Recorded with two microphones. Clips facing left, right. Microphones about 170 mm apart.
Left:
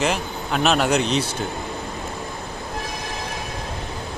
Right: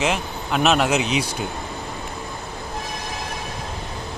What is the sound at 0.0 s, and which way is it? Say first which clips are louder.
Speech: even; centre (ahead or behind).